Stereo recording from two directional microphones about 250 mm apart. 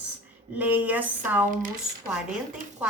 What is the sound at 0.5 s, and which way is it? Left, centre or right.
Speech, centre.